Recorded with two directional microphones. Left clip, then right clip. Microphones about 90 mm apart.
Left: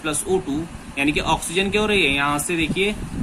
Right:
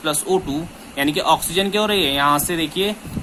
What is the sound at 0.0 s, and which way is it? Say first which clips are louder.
Speech: right 3 dB; 30° right (ahead or behind).